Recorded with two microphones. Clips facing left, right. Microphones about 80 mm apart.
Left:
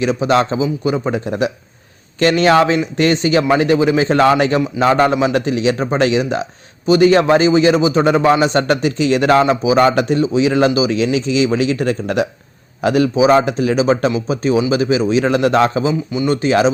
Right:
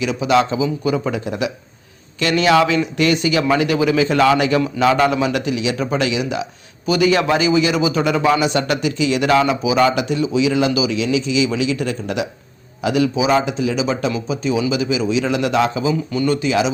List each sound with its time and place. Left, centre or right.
0.0 s a man's voice: left
0.6 s a man's voice: left